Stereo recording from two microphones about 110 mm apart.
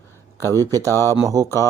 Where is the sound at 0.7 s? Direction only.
25° right (ahead or behind).